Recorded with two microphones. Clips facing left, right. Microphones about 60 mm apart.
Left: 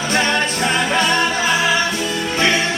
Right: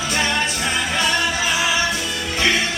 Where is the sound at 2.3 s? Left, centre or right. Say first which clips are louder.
Left 2 dB; left.